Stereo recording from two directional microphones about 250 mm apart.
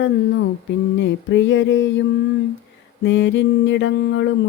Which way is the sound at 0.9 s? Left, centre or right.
Left.